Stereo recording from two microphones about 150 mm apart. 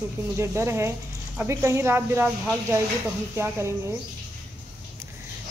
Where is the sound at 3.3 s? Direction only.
15° right (ahead or behind).